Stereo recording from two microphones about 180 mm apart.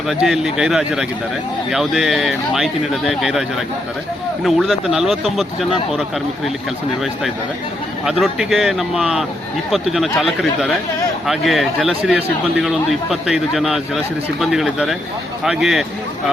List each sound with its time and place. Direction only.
0.1 s speech: centre (ahead or behind)
4.4 s speech: centre (ahead or behind)
8.0 s speech: centre (ahead or behind)